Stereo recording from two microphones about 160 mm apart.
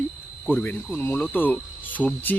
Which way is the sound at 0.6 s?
10° left (ahead or behind).